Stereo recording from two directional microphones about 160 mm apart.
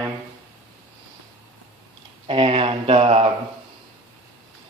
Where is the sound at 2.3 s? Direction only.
35° right (ahead or behind).